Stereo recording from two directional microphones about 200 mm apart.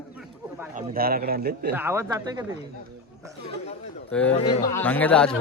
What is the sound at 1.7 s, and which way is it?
Speech, 10° right (ahead or behind).